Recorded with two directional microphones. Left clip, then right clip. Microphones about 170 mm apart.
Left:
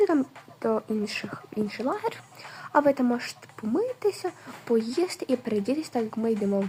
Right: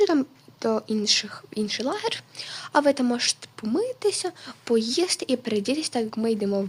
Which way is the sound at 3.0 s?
15° right (ahead or behind).